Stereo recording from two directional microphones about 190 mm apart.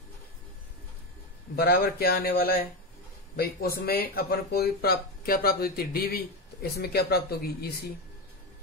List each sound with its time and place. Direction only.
1.6 s speech: 55° left (ahead or behind)